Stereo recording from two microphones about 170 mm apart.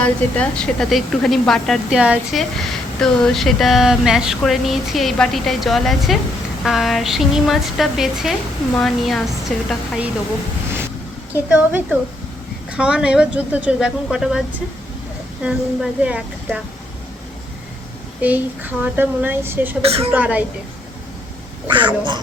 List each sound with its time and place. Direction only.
0.0 s speech: 10° left (ahead or behind)
12.7 s speech: 5° right (ahead or behind)
15.4 s a woman's voice: 5° right (ahead or behind)
18.2 s a woman's voice: 10° right (ahead or behind)
19.8 s a woman's voice: 35° right (ahead or behind)
20.1 s a woman's voice: 10° right (ahead or behind)
21.7 s speech: 30° right (ahead or behind)